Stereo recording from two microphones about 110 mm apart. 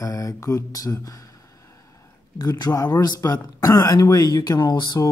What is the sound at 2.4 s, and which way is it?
Speech, 35° left (ahead or behind).